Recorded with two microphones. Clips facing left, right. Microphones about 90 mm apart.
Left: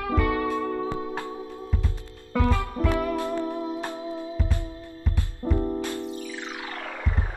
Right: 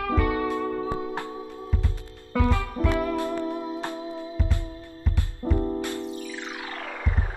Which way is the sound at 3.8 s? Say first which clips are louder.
Even; 20° left (ahead or behind).